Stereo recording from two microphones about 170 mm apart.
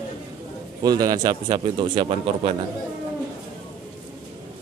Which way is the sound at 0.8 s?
20° right (ahead or behind).